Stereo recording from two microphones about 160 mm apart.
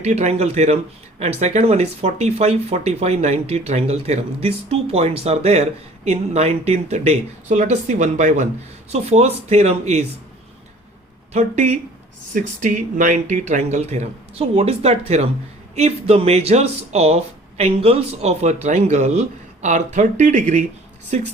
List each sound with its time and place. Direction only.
0.0 s speech: 45° right (ahead or behind)
11.3 s speech: 45° right (ahead or behind)